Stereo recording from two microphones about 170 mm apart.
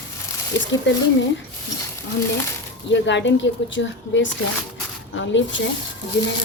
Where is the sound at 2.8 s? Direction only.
90° left.